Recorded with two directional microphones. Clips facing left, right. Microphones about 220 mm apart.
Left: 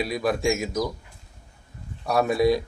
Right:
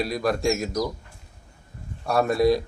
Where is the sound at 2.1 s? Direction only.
Centre (ahead or behind).